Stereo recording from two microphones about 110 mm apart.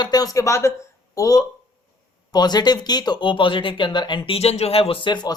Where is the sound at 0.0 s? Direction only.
35° left (ahead or behind).